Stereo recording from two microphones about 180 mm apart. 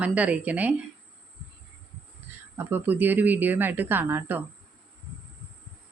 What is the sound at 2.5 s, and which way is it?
A woman's voice, 10° right (ahead or behind).